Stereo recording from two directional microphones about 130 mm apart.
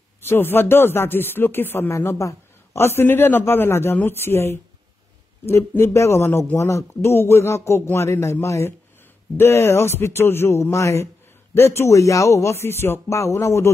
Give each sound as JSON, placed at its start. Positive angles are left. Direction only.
{"t": 0.2, "sound": "speech", "side_deg": 15}